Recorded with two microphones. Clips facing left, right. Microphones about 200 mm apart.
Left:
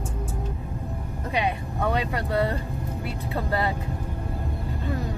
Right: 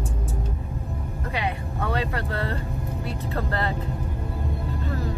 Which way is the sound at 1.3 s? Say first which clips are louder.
Left 3 dB; 20° left (ahead or behind).